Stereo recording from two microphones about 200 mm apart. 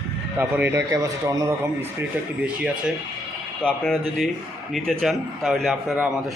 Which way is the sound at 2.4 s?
5° right (ahead or behind).